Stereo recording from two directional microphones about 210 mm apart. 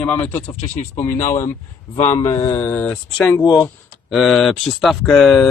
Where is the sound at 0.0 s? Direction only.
5° left (ahead or behind).